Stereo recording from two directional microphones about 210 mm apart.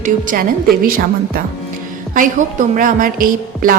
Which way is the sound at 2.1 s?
40° right (ahead or behind).